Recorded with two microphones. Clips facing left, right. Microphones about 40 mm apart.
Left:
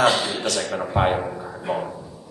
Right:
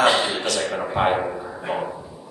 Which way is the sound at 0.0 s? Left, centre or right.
Centre.